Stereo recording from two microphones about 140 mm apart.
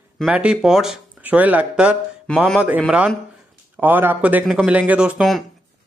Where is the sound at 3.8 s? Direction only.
15° right (ahead or behind).